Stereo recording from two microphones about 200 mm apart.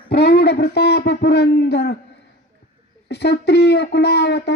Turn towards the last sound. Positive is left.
turn(degrees=60)  # may be behind; listen again after turning